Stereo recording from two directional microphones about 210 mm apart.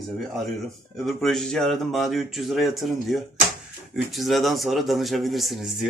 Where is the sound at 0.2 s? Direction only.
Centre (ahead or behind).